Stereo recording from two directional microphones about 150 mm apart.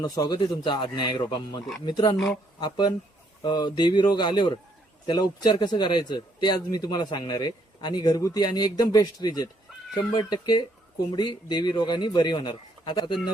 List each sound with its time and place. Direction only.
0.0 s a man's voice: 25° left (ahead or behind)
2.1 s speech: centre (ahead or behind)
2.6 s a man's voice: 30° left (ahead or behind)